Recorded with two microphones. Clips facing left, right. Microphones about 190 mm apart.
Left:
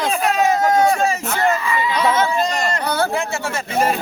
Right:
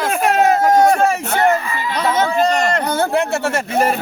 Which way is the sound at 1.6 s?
45° right (ahead or behind).